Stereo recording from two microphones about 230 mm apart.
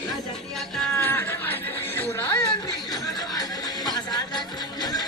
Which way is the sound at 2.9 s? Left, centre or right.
Centre.